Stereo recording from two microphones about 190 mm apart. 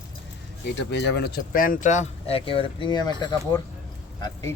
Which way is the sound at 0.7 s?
65° left (ahead or behind).